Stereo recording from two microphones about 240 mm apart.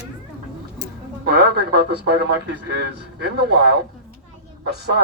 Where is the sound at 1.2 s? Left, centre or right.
Right.